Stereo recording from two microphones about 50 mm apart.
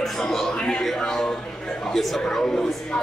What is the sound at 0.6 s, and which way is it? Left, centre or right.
Speech, centre.